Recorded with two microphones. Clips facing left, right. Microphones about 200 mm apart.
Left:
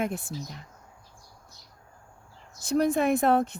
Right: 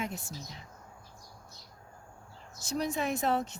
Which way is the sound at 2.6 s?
55° left (ahead or behind).